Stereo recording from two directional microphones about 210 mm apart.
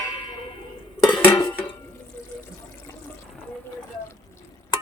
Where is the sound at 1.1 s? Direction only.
10° left (ahead or behind).